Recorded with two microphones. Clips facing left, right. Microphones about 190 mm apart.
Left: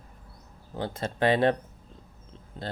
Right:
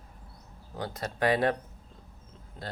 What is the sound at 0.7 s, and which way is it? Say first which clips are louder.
Speech: left 3 dB; 25° left (ahead or behind).